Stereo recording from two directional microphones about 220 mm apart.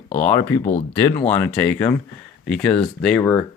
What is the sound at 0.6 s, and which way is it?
Speech, 35° left (ahead or behind).